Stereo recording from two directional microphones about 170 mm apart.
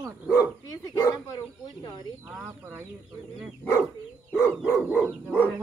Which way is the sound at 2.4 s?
15° right (ahead or behind).